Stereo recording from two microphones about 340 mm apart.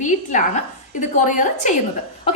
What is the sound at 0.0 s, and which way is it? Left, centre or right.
A woman's voice, left.